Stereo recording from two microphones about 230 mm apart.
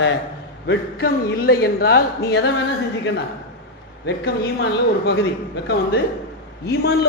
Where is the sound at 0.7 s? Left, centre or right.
Left.